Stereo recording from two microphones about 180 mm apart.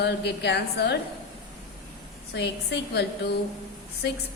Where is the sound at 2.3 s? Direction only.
70° left (ahead or behind).